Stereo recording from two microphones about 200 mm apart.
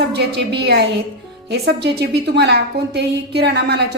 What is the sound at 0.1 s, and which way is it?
A woman's voice, 55° right (ahead or behind).